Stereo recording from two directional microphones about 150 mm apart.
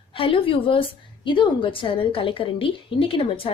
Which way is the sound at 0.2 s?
35° left (ahead or behind).